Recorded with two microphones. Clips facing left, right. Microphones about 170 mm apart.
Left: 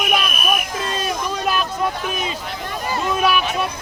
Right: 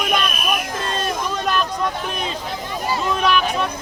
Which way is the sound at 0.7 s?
5° left (ahead or behind).